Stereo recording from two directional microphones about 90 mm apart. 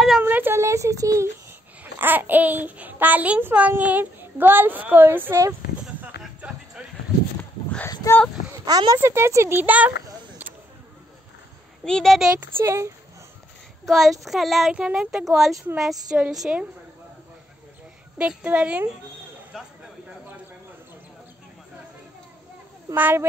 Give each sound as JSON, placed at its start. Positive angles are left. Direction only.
{"t": 0.2, "sound": "a sound", "side_deg": -25}
{"t": 2.0, "sound": "a child's voice", "side_deg": -20}
{"t": 5.8, "sound": "a sound", "side_deg": -15}
{"t": 8.1, "sound": "speech", "side_deg": 35}
{"t": 8.6, "sound": "speech", "side_deg": -45}
{"t": 8.9, "sound": "a child's voice", "side_deg": -30}
{"t": 11.8, "sound": "speech", "side_deg": 5}
{"t": 12.5, "sound": "speech", "side_deg": -30}
{"t": 13.8, "sound": "a woman's voice", "side_deg": 0}
{"t": 18.4, "sound": "a woman's voice", "side_deg": -15}
{"t": 19.5, "sound": "speech", "side_deg": -5}
{"t": 22.9, "sound": "a child's voice", "side_deg": -20}